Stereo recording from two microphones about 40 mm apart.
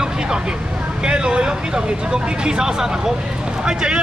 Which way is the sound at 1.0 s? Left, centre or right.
Right.